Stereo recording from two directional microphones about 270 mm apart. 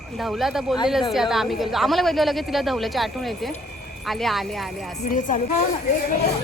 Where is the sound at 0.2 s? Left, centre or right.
Centre.